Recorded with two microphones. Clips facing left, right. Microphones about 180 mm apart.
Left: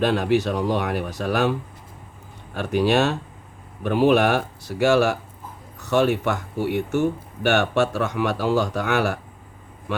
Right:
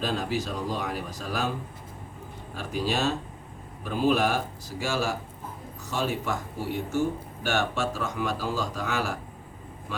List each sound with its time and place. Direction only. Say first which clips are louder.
0.0 s speech: left 9 dB; 70° left (ahead or behind)
2.6 s speech: left 9 dB; 70° left (ahead or behind)